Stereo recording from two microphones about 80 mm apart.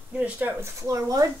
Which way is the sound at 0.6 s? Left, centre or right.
Right.